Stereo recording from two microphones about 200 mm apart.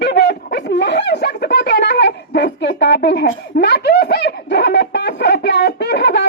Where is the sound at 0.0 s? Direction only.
60° left (ahead or behind).